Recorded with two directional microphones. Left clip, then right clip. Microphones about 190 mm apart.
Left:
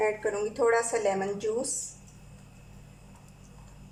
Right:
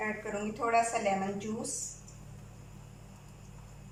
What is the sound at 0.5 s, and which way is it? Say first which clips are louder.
Speech: left 2 dB; 45° left (ahead or behind).